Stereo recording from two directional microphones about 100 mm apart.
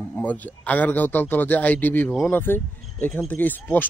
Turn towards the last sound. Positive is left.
turn(degrees=15)  # may be behind; listen again after turning